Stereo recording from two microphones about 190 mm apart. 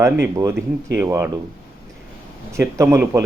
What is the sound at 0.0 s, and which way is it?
Speech, 15° right (ahead or behind).